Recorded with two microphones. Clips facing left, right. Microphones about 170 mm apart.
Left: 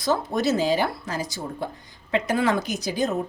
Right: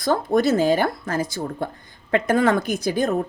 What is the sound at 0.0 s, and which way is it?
A woman's voice, 50° right (ahead or behind).